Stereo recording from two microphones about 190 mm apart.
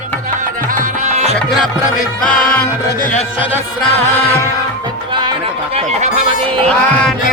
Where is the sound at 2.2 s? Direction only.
10° left (ahead or behind).